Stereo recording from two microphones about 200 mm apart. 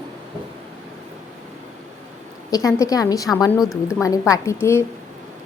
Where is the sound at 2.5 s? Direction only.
15° left (ahead or behind).